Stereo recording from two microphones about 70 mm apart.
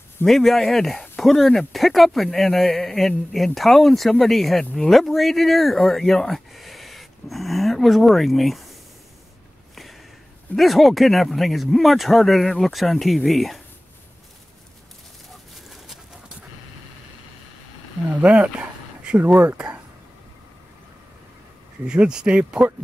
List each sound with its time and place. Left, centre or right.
0.3 s speech: centre
10.5 s speech: centre
18.2 s a sound: centre
21.8 s speech: centre